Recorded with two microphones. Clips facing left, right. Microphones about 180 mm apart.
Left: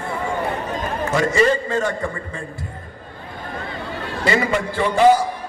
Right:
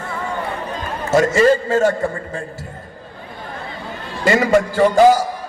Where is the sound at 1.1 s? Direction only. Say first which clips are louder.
Right 5 dB; 40° right (ahead or behind).